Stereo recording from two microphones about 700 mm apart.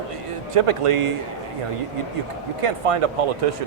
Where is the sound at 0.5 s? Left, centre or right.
Right.